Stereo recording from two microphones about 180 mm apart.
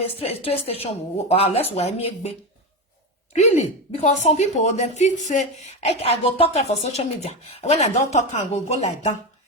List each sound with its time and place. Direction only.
0.0 s a woman's voice: 35° left (ahead or behind)
3.3 s a woman's voice: 40° left (ahead or behind)